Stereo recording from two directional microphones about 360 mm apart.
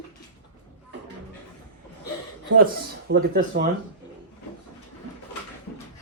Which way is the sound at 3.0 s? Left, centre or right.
Right.